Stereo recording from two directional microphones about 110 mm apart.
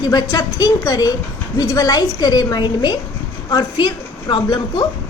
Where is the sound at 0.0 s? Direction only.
35° left (ahead or behind).